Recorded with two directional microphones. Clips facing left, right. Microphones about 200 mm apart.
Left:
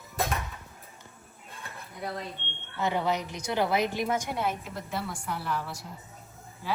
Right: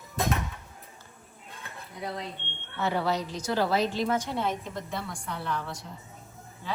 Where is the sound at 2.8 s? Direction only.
15° left (ahead or behind).